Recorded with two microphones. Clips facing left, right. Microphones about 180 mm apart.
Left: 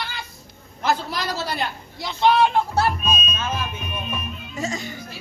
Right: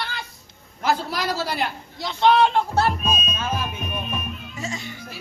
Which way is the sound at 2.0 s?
10° left (ahead or behind).